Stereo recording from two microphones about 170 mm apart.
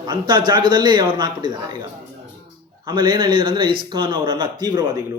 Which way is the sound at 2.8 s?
25° right (ahead or behind).